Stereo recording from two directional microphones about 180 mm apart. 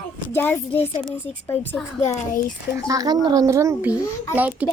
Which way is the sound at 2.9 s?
20° right (ahead or behind).